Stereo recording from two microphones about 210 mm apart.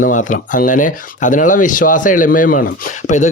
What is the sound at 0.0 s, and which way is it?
A man's voice, 35° left (ahead or behind).